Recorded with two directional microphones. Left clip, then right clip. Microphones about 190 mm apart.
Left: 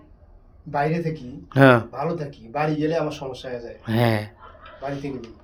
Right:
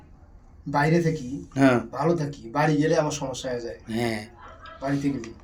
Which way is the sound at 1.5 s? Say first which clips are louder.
Left 6 dB; 55° left (ahead or behind).